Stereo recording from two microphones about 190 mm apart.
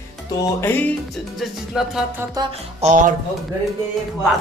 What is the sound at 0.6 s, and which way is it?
Speech, 10° left (ahead or behind).